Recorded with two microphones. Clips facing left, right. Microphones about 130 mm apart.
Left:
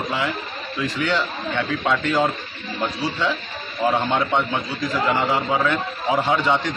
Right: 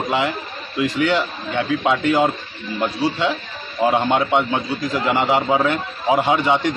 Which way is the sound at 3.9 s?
15° right (ahead or behind).